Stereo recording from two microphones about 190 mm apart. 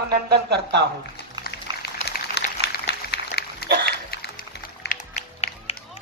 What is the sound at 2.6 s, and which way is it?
Dog, 60° left (ahead or behind).